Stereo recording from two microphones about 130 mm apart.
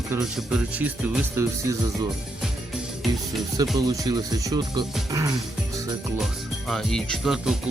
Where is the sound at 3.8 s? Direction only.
30° right (ahead or behind).